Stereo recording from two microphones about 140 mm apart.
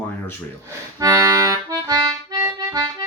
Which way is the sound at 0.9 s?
25° right (ahead or behind).